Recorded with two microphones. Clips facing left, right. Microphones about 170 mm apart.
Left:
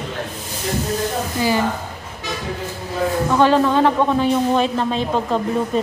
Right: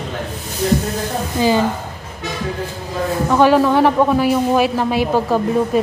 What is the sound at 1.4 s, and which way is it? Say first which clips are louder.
Speech: right 4 dB; 20° right (ahead or behind).